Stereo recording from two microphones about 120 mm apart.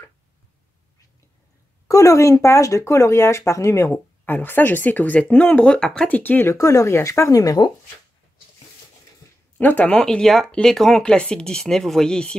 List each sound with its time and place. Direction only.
1.9 s speech: 30° left (ahead or behind)
9.6 s speech: 15° left (ahead or behind)